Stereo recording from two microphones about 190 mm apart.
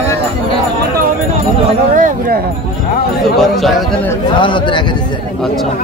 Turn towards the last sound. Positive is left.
turn(degrees=25)  # may be behind; listen again after turning